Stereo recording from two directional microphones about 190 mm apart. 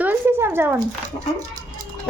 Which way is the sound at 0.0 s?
10° right (ahead or behind).